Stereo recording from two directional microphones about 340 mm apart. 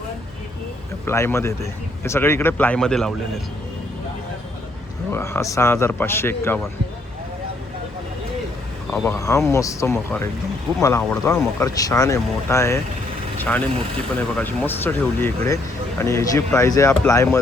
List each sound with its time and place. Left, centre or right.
1.0 s speech: centre
5.1 s speech: centre
8.9 s speech: centre
13.7 s speech: centre
14.2 s speech: centre